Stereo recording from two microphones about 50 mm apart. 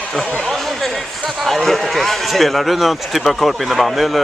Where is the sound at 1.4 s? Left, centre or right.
Centre.